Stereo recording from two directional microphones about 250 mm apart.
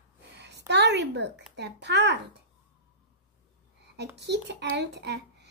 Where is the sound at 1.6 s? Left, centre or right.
Right.